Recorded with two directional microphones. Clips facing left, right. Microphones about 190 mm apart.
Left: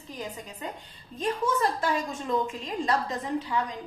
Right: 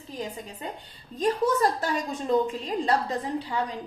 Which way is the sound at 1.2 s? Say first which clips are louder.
Right 4 dB; 35° right (ahead or behind).